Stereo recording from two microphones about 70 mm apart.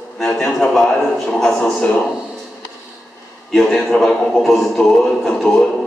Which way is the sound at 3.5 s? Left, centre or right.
Centre.